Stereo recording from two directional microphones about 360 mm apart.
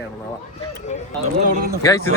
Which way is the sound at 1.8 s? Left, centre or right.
Centre.